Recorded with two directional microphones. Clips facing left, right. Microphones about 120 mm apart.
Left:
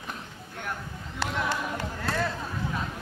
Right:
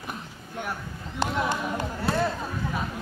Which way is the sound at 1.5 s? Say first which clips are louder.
Right 2 dB; 15° right (ahead or behind).